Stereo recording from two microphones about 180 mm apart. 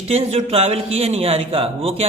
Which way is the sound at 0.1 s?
35° right (ahead or behind).